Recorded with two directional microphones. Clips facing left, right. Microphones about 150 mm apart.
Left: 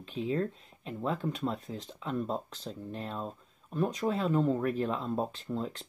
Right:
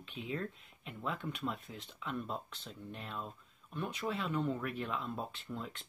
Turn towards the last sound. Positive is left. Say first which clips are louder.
# left 8 dB
turn(degrees=35)  # may be behind; listen again after turning